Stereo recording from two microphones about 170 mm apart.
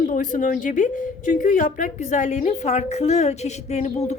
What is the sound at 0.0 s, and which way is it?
A woman's voice, 50° left (ahead or behind).